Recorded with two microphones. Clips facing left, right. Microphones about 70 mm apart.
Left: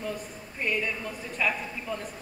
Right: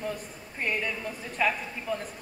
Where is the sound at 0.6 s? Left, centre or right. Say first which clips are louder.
Left 1 dB; right.